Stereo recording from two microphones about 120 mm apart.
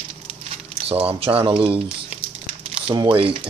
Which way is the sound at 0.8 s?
55° right (ahead or behind).